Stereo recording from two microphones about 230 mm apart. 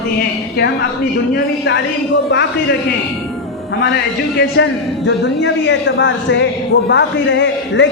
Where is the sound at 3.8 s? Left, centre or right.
Left.